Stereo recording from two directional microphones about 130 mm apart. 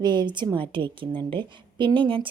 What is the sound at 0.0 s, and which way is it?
A woman's voice, 35° right (ahead or behind).